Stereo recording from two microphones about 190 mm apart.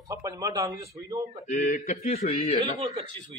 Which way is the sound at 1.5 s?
40° left (ahead or behind).